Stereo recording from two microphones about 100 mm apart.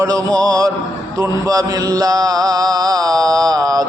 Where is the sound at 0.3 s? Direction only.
40° right (ahead or behind).